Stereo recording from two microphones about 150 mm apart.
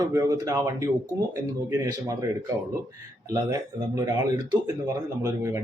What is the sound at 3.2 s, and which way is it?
Speech, 25° right (ahead or behind).